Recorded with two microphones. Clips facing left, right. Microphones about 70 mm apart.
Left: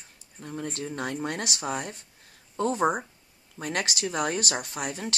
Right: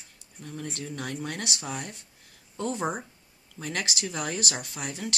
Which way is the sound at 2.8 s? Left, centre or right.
Left.